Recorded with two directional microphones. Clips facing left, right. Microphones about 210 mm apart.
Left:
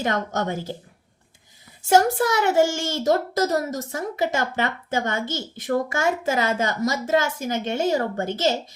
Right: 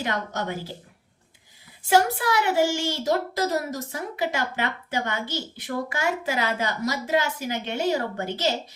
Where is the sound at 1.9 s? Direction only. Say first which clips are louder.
Left 3 dB; 45° left (ahead or behind).